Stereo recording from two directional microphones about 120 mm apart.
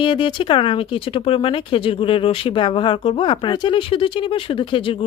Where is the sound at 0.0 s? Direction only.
45° left (ahead or behind).